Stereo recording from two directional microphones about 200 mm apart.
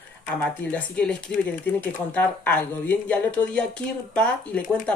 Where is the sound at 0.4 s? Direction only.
5° left (ahead or behind).